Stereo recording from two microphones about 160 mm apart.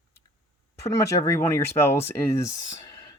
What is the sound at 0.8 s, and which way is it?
Speech, 20° left (ahead or behind).